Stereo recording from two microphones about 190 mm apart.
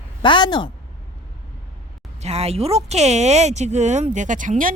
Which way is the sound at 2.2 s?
35° right (ahead or behind).